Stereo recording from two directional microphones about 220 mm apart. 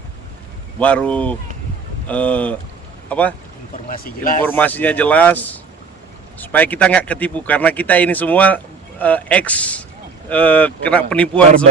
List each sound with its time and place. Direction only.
0.8 s speech: 5° left (ahead or behind)
3.8 s speech: 40° left (ahead or behind)
4.4 s speech: 10° left (ahead or behind)